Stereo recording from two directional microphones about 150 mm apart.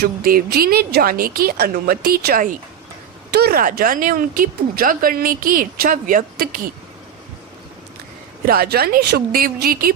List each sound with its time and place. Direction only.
0.0 s a woman's voice: 80° right
3.3 s speech: 90° right
8.4 s a woman's voice: 90° right